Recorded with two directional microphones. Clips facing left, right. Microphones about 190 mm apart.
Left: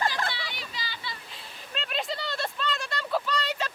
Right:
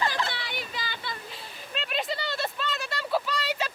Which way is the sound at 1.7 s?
Centre (ahead or behind).